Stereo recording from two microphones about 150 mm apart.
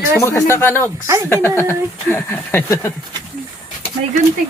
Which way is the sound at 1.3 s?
15° left (ahead or behind).